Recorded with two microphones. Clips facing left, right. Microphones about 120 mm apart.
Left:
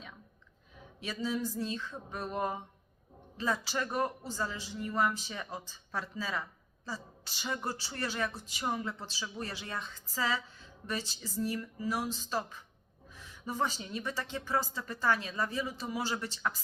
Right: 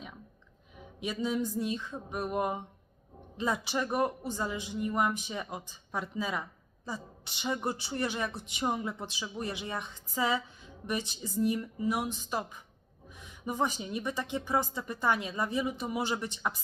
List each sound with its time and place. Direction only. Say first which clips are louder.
0.9 s a man's voice: right 3 dB; 20° right (ahead or behind)